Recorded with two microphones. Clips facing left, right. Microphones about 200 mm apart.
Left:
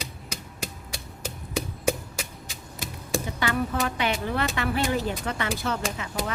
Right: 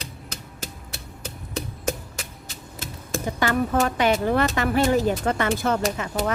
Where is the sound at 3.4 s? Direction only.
45° right (ahead or behind).